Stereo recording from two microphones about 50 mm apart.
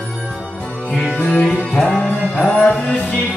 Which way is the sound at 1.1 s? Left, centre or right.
Left.